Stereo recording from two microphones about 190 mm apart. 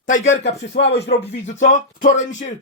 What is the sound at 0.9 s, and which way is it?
Speech, 65° left (ahead or behind).